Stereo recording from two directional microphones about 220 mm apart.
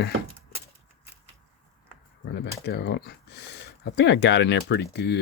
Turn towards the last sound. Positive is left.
turn(degrees=50)  # may be behind; listen again after turning